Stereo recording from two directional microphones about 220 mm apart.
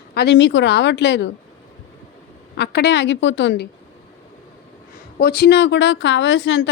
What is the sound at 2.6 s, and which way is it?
A woman's voice, 50° left (ahead or behind).